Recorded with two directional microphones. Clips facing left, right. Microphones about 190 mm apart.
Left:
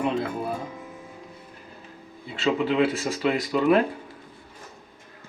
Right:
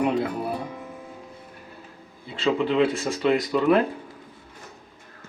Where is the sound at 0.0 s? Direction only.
15° right (ahead or behind).